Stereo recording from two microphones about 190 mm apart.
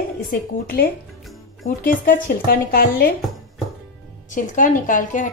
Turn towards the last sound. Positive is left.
turn(degrees=45)  # may be behind; listen again after turning